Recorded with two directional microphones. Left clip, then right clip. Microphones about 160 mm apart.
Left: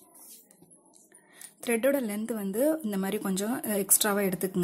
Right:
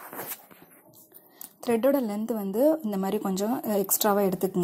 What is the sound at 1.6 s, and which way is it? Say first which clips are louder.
A woman's voice: right 3 dB; centre (ahead or behind).